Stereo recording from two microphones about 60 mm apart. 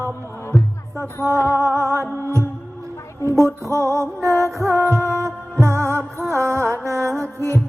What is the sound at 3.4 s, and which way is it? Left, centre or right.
Music, right.